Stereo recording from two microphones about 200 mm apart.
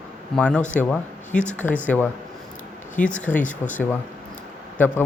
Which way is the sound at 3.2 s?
5° left (ahead or behind).